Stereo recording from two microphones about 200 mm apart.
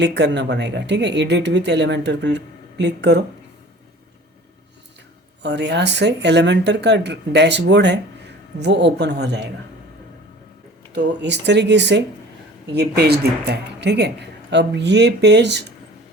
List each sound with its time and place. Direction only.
0.0 s speech: 60° right (ahead or behind)
5.4 s speech: 60° right (ahead or behind)
10.9 s speech: 60° right (ahead or behind)